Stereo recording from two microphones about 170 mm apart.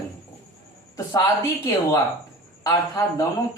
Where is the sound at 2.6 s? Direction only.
20° left (ahead or behind).